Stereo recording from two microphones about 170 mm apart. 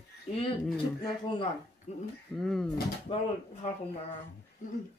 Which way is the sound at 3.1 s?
30° left (ahead or behind).